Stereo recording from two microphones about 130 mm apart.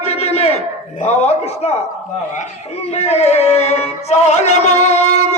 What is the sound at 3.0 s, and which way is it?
Music, 55° left (ahead or behind).